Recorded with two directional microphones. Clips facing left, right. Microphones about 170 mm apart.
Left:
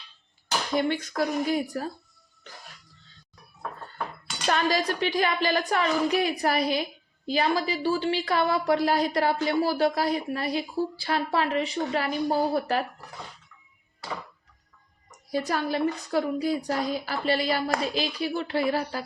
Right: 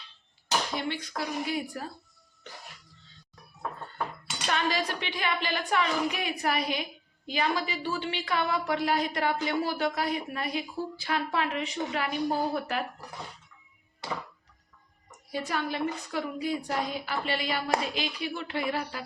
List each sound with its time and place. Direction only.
0.8 s speech: 50° left (ahead or behind)
4.4 s a woman's voice: 40° left (ahead or behind)
15.3 s a woman's voice: 40° left (ahead or behind)